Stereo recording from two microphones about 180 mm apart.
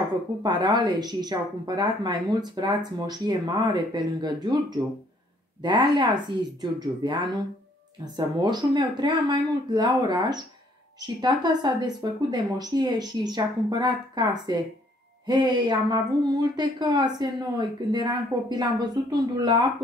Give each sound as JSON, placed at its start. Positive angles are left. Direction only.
{"t": 0.4, "sound": "speech", "side_deg": -25}